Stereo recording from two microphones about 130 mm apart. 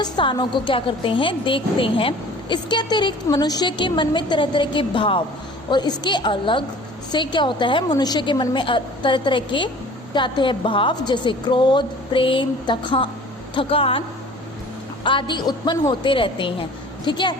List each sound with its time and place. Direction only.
0.0 s a woman's voice: 35° left (ahead or behind)
15.0 s a woman's voice: 40° left (ahead or behind)